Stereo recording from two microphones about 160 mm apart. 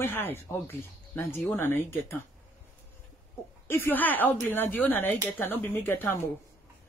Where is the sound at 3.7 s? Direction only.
15° left (ahead or behind).